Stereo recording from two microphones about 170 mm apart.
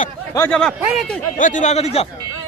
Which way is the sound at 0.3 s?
10° left (ahead or behind).